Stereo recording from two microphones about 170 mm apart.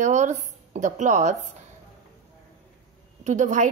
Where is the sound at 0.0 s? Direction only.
45° right (ahead or behind).